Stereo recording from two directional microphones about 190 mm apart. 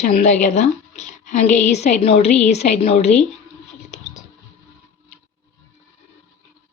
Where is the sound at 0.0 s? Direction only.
40° left (ahead or behind).